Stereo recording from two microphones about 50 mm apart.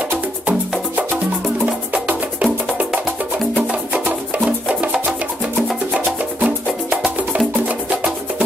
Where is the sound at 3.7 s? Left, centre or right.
Right.